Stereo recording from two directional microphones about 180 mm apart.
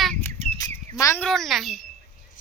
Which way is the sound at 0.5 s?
20° left (ahead or behind).